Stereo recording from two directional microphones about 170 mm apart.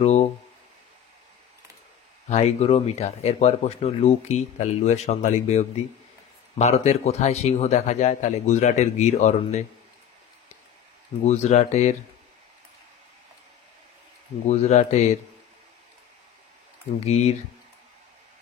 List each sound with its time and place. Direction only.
0.0 s speech: 40° left (ahead or behind)
2.2 s speech: 40° left (ahead or behind)
11.2 s speech: 40° left (ahead or behind)
14.4 s speech: 40° left (ahead or behind)
17.0 s speech: 40° left (ahead or behind)